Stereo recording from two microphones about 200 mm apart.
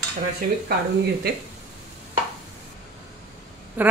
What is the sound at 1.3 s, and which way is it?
Speech, 50° right (ahead or behind).